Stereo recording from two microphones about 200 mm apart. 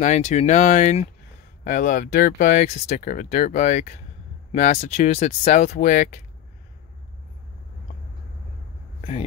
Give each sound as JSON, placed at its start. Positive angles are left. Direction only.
{"t": 0.0, "sound": "speech", "side_deg": 35}